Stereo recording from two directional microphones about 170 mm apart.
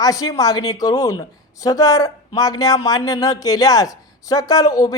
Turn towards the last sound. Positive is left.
turn(degrees=20)  # may be behind; listen again after turning